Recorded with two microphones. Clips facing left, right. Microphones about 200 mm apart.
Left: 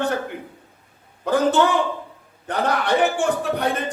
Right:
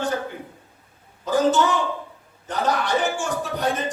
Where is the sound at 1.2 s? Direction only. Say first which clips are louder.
Left 1 dB; 60° left (ahead or behind).